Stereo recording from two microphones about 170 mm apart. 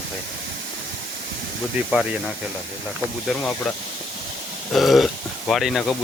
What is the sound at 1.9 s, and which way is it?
Speech, 5° right (ahead or behind).